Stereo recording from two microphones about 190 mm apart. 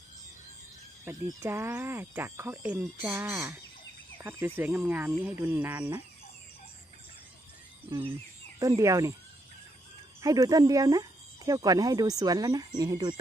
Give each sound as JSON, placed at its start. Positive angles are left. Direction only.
{"t": 1.0, "sound": "speech", "side_deg": -10}
{"t": 8.5, "sound": "speech", "side_deg": -15}
{"t": 10.2, "sound": "speech", "side_deg": -20}